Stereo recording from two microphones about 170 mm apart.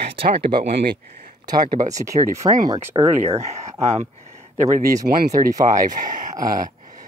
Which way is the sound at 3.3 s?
40° right (ahead or behind).